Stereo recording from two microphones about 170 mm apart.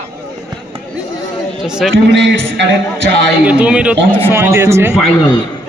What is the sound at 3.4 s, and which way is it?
A man's voice, 5° right (ahead or behind).